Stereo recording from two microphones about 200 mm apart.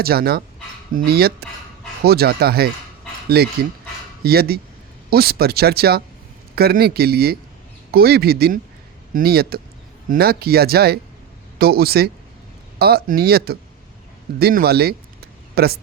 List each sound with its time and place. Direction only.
0.0 s speech: 50° right (ahead or behind)